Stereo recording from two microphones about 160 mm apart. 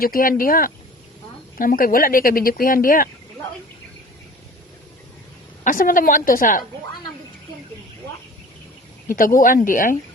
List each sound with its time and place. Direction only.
0.0 s speech: 65° left (ahead or behind)
5.6 s speech: 60° left (ahead or behind)
9.0 s speech: 60° left (ahead or behind)